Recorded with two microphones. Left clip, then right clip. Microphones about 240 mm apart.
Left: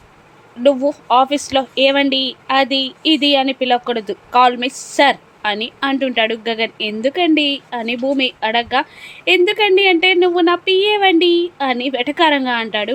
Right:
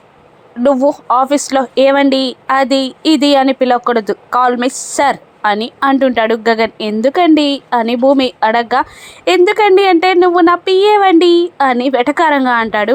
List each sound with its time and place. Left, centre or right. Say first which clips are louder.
0.6 s speech: right 3 dB; centre